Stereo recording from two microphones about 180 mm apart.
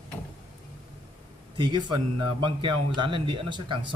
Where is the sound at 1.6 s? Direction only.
25° right (ahead or behind).